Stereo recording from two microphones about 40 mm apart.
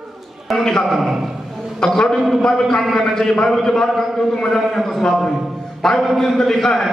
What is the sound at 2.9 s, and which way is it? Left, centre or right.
A man's voice, centre.